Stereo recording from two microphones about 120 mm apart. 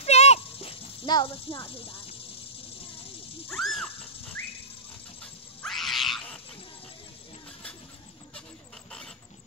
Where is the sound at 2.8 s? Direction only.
50° left (ahead or behind).